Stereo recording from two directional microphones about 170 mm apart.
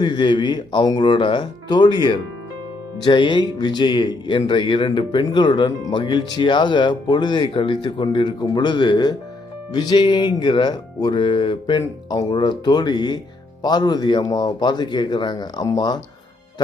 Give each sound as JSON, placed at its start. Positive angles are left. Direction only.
{"t": 0.0, "sound": "speech", "side_deg": 25}